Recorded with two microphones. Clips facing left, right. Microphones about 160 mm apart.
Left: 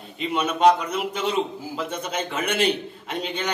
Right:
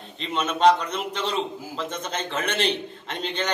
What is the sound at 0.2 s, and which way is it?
A man's voice, 10° left (ahead or behind).